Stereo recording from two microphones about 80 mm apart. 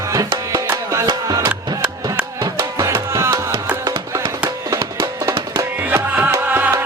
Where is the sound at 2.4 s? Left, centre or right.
Right.